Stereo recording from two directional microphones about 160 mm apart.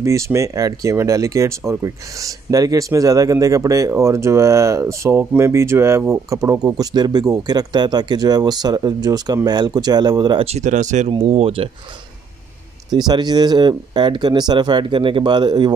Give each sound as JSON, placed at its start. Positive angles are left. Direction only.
{"t": 0.0, "sound": "speech", "side_deg": -20}
{"t": 10.4, "sound": "speech", "side_deg": -45}
{"t": 11.1, "sound": "speech", "side_deg": -35}
{"t": 12.9, "sound": "speech", "side_deg": -25}